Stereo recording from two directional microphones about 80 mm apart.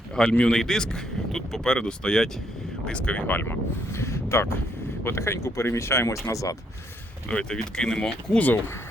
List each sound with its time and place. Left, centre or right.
0.3 s a man's voice: centre; by 6.6 s left
7.3 s a man's voice: centre